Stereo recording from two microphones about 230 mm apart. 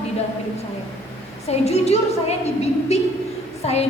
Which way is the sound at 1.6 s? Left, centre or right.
Left.